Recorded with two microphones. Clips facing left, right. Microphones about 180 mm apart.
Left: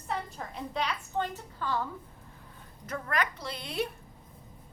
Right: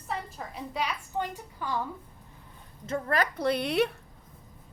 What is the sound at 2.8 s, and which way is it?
Speech, 30° right (ahead or behind).